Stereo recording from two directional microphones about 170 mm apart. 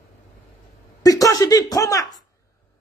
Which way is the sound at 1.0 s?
20° left (ahead or behind).